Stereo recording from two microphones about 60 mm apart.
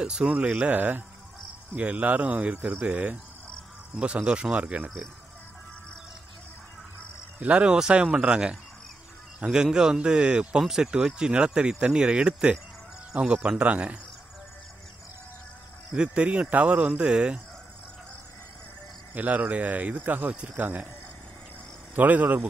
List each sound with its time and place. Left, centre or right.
0.0 s speech: centre
7.3 s speech: right
15.9 s speech: centre
19.1 s speech: right
21.9 s speech: right